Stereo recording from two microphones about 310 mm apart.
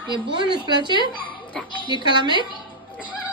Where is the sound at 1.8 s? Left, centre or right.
Centre.